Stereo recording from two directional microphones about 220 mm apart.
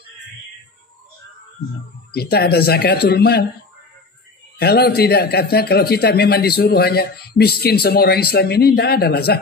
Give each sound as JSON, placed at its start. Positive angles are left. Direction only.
{"t": 2.1, "sound": "a man's voice", "side_deg": 45}
{"t": 4.6, "sound": "a man's voice", "side_deg": 45}